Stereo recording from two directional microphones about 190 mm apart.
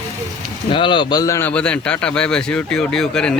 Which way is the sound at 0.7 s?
25° left (ahead or behind).